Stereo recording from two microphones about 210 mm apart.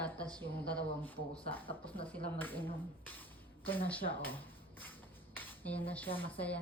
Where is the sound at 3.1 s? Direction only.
10° left (ahead or behind).